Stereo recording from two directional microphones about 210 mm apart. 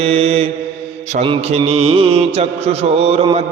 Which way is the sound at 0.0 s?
30° right (ahead or behind).